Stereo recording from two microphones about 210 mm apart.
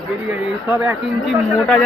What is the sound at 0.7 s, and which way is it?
Speech, 5° right (ahead or behind).